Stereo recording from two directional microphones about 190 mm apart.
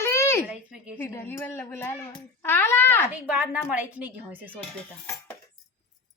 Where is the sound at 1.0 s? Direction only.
10° left (ahead or behind).